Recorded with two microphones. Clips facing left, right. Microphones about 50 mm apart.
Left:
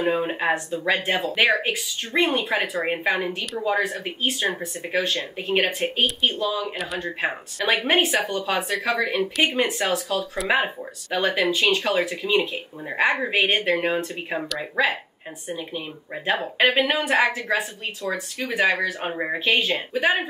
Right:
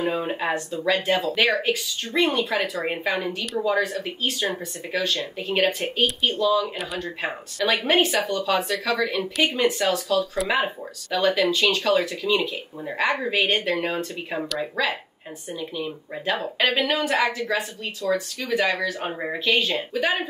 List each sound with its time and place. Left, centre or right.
0.0 s speech: centre
2.8 s speech: centre
18.0 s speech: left
18.5 s speech: centre